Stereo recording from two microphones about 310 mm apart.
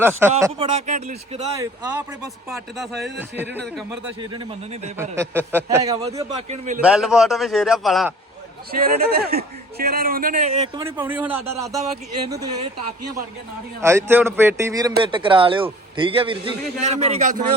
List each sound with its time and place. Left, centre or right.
0.2 s a man's voice: centre
0.7 s a man's voice: right
2.5 s speech: centre
4.3 s a man's voice: centre
6.8 s speech: centre
8.8 s a man's voice: right
10.8 s a man's voice: centre
13.8 s a man's voice: centre; by 17.4 s right